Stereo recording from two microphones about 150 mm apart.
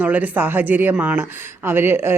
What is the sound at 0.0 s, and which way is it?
Speech, 10° right (ahead or behind).